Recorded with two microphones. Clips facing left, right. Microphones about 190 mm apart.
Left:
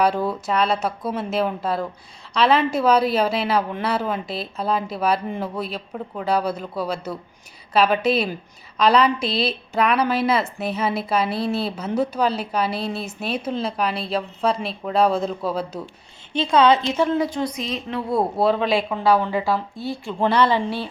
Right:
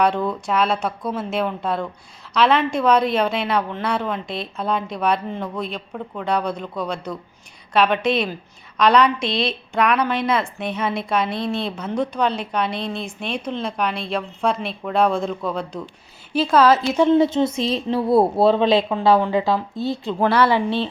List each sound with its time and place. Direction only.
0.0 s a woman's voice: 5° left (ahead or behind)
17.0 s speech: 25° right (ahead or behind)
20.3 s speech: 10° right (ahead or behind)